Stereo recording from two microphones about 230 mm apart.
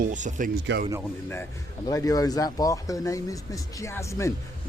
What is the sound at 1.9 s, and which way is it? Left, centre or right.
Speech, centre.